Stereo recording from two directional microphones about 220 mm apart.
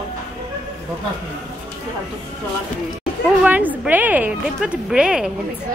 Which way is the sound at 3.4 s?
5° right (ahead or behind).